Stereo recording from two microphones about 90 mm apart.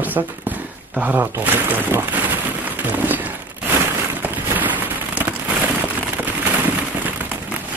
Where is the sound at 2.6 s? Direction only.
20° right (ahead or behind).